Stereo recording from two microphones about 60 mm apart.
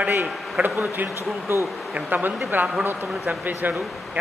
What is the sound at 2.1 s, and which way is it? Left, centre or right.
Speech, right.